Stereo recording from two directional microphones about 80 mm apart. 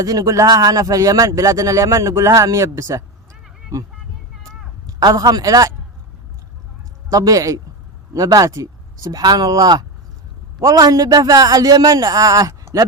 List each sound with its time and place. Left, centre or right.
0.0 s a man's voice: right
4.9 s a man's voice: right
7.1 s a man's voice: right